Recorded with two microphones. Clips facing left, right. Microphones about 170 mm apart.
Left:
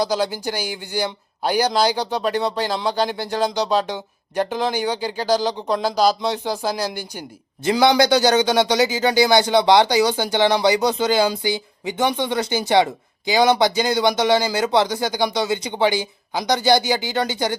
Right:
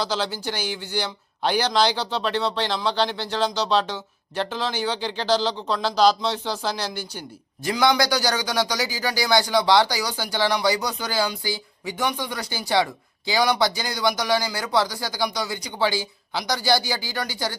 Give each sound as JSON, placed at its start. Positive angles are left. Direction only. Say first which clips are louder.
{"t": 0.0, "sound": "speech", "louder": "left 5 dB", "side_deg": 10}
{"t": 7.6, "sound": "speech", "louder": "left 5 dB", "side_deg": 25}